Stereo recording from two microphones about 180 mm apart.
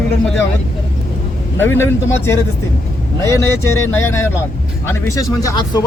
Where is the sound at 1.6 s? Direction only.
15° left (ahead or behind).